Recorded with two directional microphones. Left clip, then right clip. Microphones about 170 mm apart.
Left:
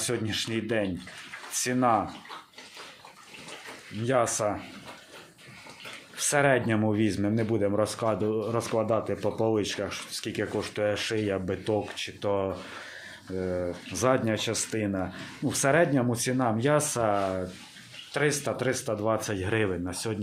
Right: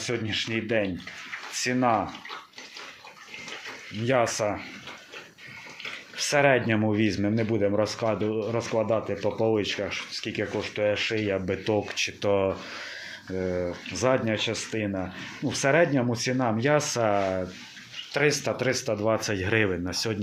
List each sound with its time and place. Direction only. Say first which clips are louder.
0.0 s speech: right 1 dB; 5° left (ahead or behind)
4.0 s speech: right 1 dB; 5° right (ahead or behind)
6.1 s speech: right 2 dB; centre (ahead or behind)
14.0 s speech: right 1 dB; 5° left (ahead or behind); by 20.1 s 10° right (ahead or behind)